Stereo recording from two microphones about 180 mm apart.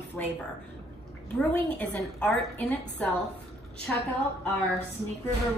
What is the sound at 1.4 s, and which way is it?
A woman's voice, 10° left (ahead or behind).